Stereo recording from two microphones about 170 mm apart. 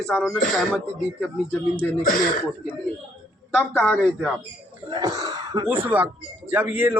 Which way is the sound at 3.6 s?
5° left (ahead or behind).